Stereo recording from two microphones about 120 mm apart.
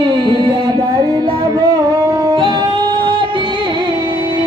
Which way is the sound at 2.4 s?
40° right (ahead or behind).